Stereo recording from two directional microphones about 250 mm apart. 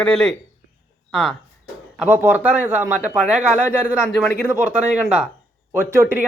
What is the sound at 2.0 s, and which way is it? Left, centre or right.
Speech, centre.